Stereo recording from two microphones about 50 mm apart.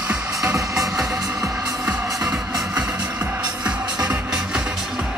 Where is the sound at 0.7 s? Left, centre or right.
Centre.